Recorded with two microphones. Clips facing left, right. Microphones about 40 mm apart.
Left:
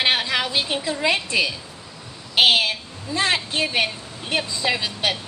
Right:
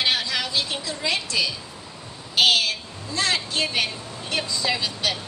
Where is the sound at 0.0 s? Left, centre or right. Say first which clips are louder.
Left 3 dB; left.